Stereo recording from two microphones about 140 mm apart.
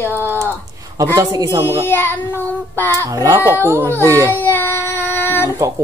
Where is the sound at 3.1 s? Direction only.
20° right (ahead or behind).